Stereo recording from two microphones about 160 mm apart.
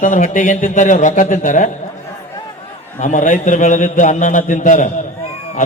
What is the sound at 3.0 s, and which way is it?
A man's voice, 50° left (ahead or behind).